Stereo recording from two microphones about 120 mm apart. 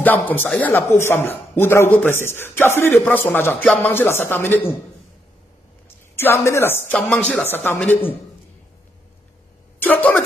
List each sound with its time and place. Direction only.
0.0 s speech: 15° left (ahead or behind)
6.1 s speech: 20° left (ahead or behind)
9.8 s speech: 15° left (ahead or behind)